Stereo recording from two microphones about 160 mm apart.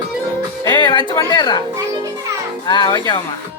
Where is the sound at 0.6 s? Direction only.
30° left (ahead or behind).